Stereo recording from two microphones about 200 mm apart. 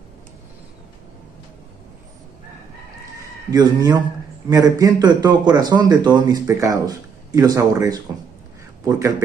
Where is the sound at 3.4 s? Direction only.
20° right (ahead or behind).